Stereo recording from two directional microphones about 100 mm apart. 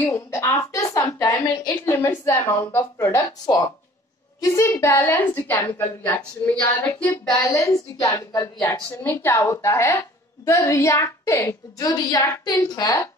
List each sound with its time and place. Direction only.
0.0 s a woman's voice: 25° left (ahead or behind)
7.2 s a woman's voice: 35° left (ahead or behind)